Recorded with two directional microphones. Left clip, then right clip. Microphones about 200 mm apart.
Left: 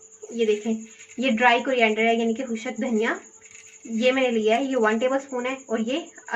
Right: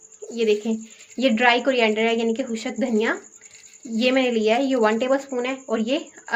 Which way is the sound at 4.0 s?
50° right (ahead or behind).